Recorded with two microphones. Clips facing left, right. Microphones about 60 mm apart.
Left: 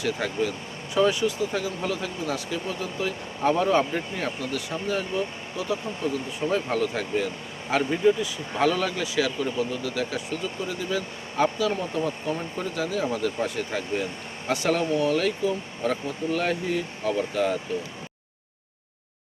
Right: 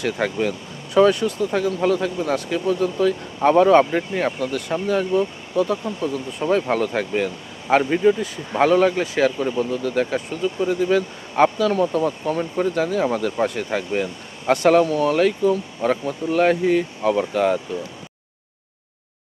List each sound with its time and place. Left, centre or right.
0.0 s speech: right
12.5 s speech: right